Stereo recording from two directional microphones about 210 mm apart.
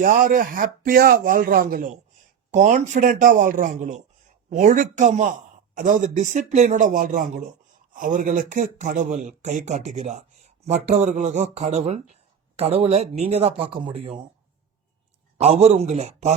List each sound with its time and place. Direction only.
0.0 s speech: 40° right (ahead or behind)
15.4 s speech: 30° right (ahead or behind)